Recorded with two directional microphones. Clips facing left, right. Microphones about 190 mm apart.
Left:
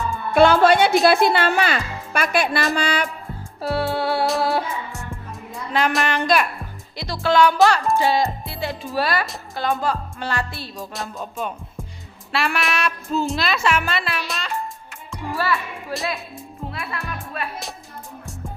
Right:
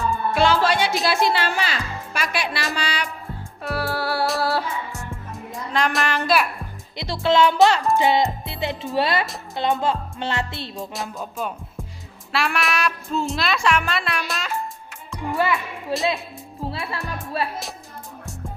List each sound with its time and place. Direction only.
0.3 s speech: 55° left (ahead or behind)
3.6 s music: 25° left (ahead or behind)
5.7 s a child's voice: centre (ahead or behind)
6.9 s music: 25° right (ahead or behind)
10.9 s music: centre (ahead or behind)
12.3 s a child's voice: centre (ahead or behind)
15.3 s speech: 20° right (ahead or behind)
15.9 s music: 25° right (ahead or behind)